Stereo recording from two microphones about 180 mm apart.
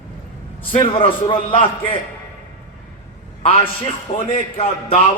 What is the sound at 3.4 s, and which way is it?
A man's voice, 30° left (ahead or behind).